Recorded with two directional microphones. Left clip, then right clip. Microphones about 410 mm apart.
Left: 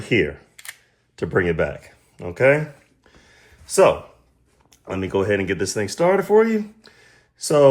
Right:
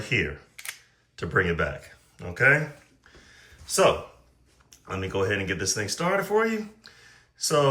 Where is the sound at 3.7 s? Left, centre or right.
Centre.